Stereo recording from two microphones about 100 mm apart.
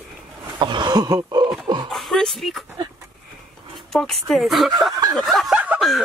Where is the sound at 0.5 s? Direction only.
50° right (ahead or behind).